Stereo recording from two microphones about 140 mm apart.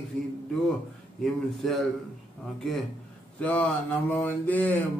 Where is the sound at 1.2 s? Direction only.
Centre (ahead or behind).